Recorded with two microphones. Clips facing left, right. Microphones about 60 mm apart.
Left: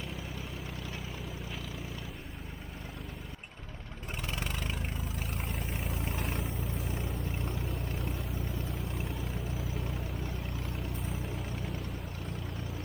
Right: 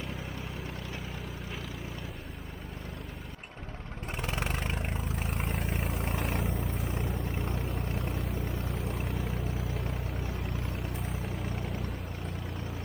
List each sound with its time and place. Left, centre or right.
4.2 s vehicle: right
5.5 s vehicle: centre